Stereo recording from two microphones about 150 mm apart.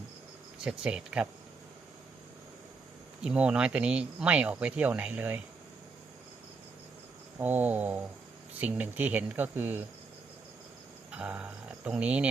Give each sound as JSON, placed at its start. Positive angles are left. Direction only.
{"t": 0.6, "sound": "speech", "side_deg": -5}
{"t": 3.2, "sound": "speech", "side_deg": -5}
{"t": 7.3, "sound": "speech", "side_deg": -10}
{"t": 11.1, "sound": "speech", "side_deg": -10}